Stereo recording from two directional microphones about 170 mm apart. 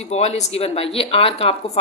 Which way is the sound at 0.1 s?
40° left (ahead or behind).